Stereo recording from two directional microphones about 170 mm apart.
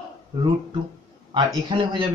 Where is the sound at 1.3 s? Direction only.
30° right (ahead or behind).